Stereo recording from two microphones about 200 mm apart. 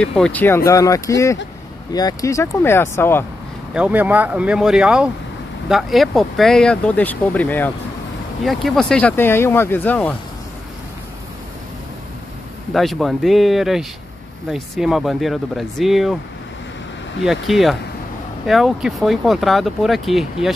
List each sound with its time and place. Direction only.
0.0 s speech: 5° left (ahead or behind)
3.7 s speech: 5° right (ahead or behind); by 10.1 s 10° left (ahead or behind)
12.7 s speech: centre (ahead or behind)
17.2 s speech: centre (ahead or behind)